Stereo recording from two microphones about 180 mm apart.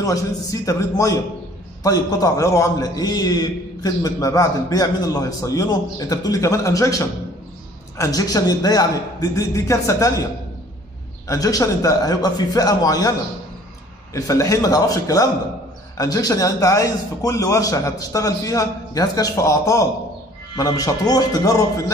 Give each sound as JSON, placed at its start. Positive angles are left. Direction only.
{"t": 0.0, "sound": "a man's voice", "side_deg": 20}
{"t": 11.2, "sound": "a man's voice", "side_deg": 20}
{"t": 14.1, "sound": "a man's voice", "side_deg": 15}